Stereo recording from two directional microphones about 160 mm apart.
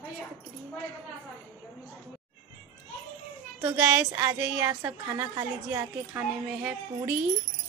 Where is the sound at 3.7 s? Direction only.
10° right (ahead or behind).